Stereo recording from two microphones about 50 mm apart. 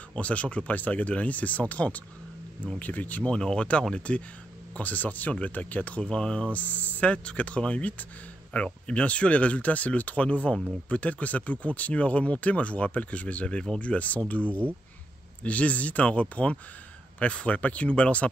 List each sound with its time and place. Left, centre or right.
0.1 s speech: left
3.3 s speech: centre